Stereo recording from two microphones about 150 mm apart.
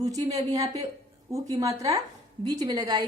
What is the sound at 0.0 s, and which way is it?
A woman's voice, 25° right (ahead or behind).